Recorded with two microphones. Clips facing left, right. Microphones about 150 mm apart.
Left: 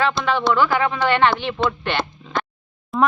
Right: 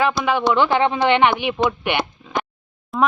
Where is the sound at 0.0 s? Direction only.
15° right (ahead or behind).